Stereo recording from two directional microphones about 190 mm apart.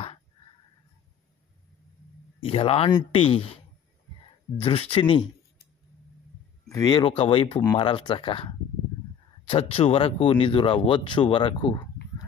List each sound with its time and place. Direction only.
2.4 s speech: 30° left (ahead or behind)
4.6 s speech: 30° left (ahead or behind)
6.7 s speech: 20° left (ahead or behind)